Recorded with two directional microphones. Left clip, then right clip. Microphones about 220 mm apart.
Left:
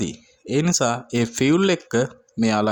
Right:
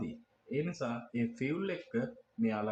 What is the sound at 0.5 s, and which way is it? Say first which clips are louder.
Speech: left 16 dB; 55° left (ahead or behind).